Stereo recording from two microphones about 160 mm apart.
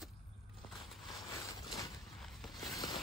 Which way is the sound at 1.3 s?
20° left (ahead or behind).